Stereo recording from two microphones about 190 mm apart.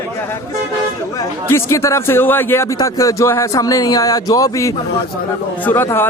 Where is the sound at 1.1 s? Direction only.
15° left (ahead or behind).